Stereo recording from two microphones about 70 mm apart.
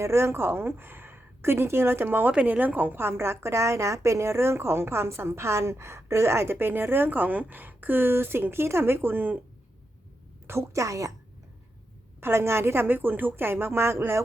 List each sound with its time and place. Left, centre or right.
0.0 s a woman's voice: right
10.4 s a woman's voice: right
12.2 s a woman's voice: right